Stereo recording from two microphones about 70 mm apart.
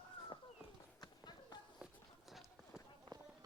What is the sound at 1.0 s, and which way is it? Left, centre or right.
Run, left.